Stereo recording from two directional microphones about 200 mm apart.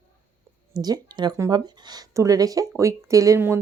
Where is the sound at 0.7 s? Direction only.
20° right (ahead or behind).